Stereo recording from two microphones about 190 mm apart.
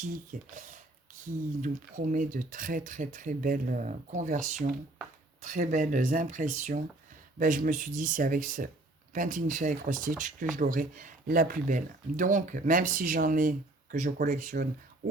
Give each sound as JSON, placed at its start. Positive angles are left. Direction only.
{"t": 0.0, "sound": "speech", "side_deg": -40}